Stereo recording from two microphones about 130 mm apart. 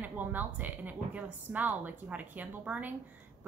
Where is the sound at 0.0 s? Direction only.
15° right (ahead or behind).